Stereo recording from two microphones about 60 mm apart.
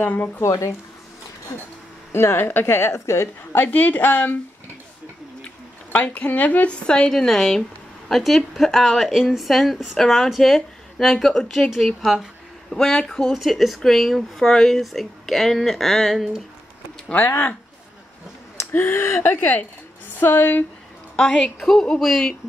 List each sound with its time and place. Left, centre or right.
0.0 s speech: left
0.4 s speech: left
2.1 s a woman's voice: left
3.5 s speech: left
5.9 s speech: left
7.1 s speech: centre
12.7 s speech: centre
18.7 s speech: left
21.2 s speech: centre